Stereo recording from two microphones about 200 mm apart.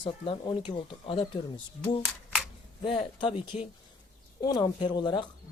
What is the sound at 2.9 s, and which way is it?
Speech, 25° left (ahead or behind).